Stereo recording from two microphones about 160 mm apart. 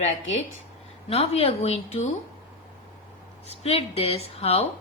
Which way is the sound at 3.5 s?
40° left (ahead or behind).